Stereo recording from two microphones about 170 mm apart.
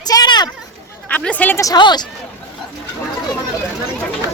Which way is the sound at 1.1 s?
10° left (ahead or behind).